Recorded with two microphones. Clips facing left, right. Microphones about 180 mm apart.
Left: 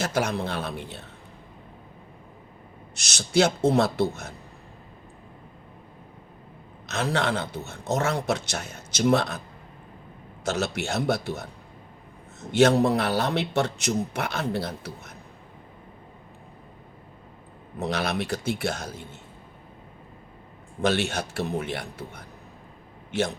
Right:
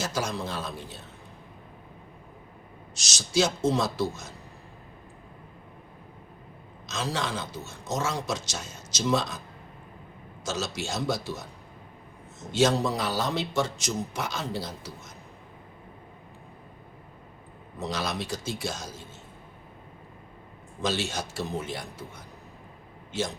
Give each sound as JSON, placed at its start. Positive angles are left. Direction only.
{"t": 0.0, "sound": "a man's voice", "side_deg": 60}
{"t": 2.9, "sound": "a man's voice", "side_deg": 60}
{"t": 6.8, "sound": "a man's voice", "side_deg": 60}
{"t": 10.4, "sound": "a man's voice", "side_deg": 60}
{"t": 17.7, "sound": "a man's voice", "side_deg": 60}
{"t": 20.8, "sound": "a man's voice", "side_deg": 60}